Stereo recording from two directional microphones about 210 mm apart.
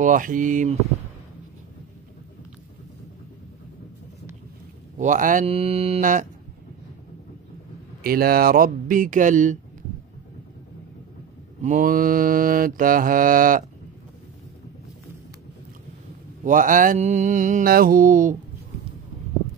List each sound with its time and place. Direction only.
0.0 s mantra: 40° right (ahead or behind)
4.9 s mantra: 40° right (ahead or behind)
8.0 s speech: 45° right (ahead or behind)
11.6 s mantra: 40° right (ahead or behind)
16.4 s mantra: 40° right (ahead or behind)